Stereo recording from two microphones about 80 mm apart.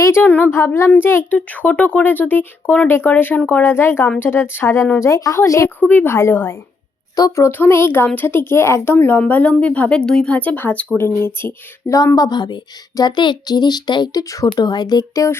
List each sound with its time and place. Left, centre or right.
0.0 s a woman's voice: left
0.5 s speech: left
5.6 s speech: left
7.2 s a woman's voice: left
7.4 s speech: left
11.9 s speech: left
12.1 s speech: left